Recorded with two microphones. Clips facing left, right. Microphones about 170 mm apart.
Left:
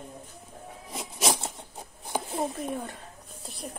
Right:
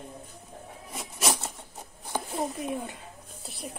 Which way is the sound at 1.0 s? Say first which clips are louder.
Left 1 dB; 25° left (ahead or behind).